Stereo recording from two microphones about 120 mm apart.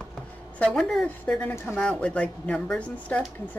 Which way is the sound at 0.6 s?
5° left (ahead or behind).